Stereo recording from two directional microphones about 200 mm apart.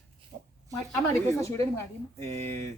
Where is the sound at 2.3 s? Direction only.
35° right (ahead or behind).